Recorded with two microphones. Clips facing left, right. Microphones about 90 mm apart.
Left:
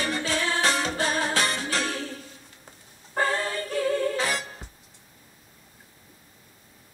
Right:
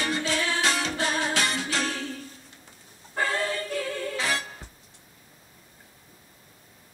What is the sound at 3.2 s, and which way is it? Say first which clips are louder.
Music: left 3 dB; 35° left (ahead or behind).